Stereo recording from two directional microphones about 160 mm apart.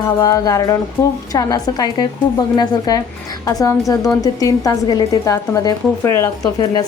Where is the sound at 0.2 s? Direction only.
20° left (ahead or behind).